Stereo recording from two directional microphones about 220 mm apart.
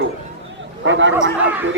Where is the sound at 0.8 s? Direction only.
55° right (ahead or behind).